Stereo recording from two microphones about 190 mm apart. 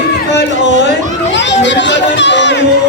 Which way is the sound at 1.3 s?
70° left (ahead or behind).